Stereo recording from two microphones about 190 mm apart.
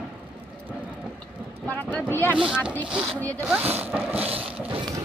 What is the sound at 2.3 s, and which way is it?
Speech, 5° right (ahead or behind).